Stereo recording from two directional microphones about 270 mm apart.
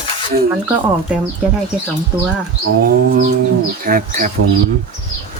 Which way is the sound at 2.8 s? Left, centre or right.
Right.